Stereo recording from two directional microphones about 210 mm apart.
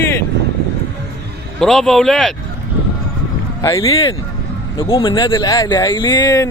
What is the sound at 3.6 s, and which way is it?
Speech, 15° left (ahead or behind).